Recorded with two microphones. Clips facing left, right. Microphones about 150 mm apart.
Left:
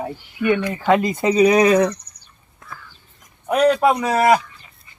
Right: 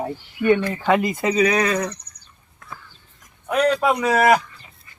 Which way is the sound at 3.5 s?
10° left (ahead or behind).